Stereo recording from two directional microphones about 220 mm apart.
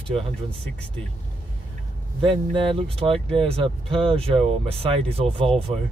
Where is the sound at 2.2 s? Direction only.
25° right (ahead or behind).